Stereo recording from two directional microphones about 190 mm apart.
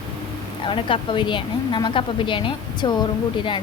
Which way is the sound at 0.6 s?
25° left (ahead or behind).